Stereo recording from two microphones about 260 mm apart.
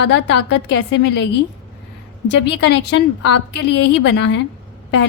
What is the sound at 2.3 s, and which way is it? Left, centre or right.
A woman's voice, left.